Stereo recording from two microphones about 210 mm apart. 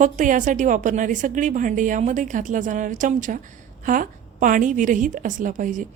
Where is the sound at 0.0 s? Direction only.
40° right (ahead or behind).